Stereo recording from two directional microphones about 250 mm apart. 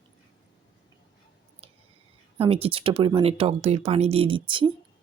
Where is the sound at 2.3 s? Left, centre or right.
Right.